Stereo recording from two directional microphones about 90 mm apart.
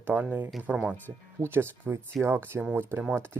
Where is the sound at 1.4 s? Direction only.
25° right (ahead or behind).